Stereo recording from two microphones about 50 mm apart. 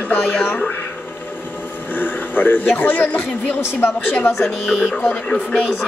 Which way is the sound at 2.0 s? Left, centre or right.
Left.